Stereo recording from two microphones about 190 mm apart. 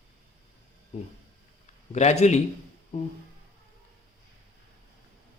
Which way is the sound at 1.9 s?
35° left (ahead or behind).